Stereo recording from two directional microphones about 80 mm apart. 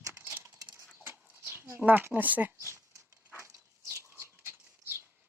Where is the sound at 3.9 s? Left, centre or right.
Right.